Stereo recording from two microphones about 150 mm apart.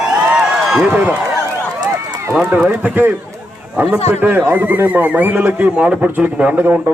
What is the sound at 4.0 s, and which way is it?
Speech, 45° left (ahead or behind).